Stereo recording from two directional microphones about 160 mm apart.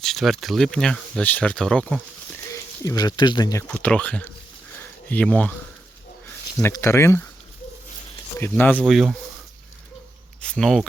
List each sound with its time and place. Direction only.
0.0 s speech: centre (ahead or behind)
2.5 s speech: 20° left (ahead or behind)
3.7 s speech: 10° left (ahead or behind)
6.6 s speech: 15° left (ahead or behind)
8.4 s speech: 10° left (ahead or behind)
8.9 s speech: centre (ahead or behind)
10.4 s speech: 5° left (ahead or behind)